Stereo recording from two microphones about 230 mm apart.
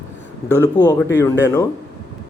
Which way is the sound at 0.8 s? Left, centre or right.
Centre.